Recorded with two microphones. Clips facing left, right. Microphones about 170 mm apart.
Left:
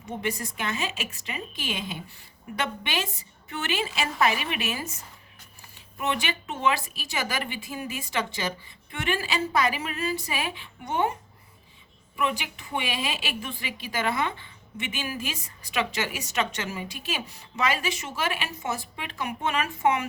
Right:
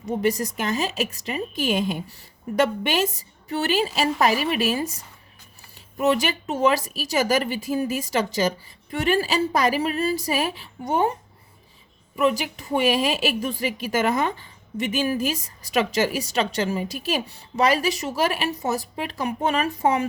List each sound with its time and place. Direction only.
0.1 s a woman's voice: 40° right (ahead or behind)
12.1 s a woman's voice: 40° right (ahead or behind)